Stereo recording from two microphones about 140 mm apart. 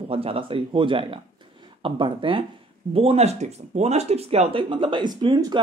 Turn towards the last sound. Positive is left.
turn(degrees=-30)  # may be behind; listen again after turning